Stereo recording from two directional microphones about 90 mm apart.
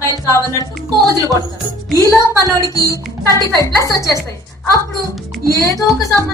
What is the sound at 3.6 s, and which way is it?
Speech, 40° left (ahead or behind).